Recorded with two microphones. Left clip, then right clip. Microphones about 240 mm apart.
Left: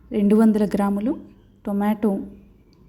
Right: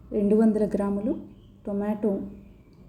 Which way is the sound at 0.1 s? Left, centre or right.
Left.